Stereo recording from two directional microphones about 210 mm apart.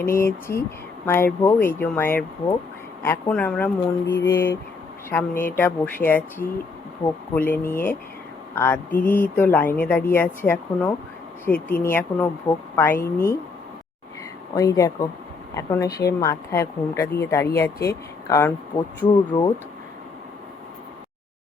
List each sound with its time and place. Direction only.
0.0 s speech: 10° left (ahead or behind)
14.5 s speech: 15° left (ahead or behind)
18.7 s speech: 30° left (ahead or behind)
19.3 s speech: 20° left (ahead or behind)